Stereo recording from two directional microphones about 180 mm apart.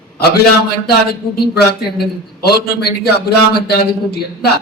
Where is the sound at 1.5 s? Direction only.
60° left (ahead or behind).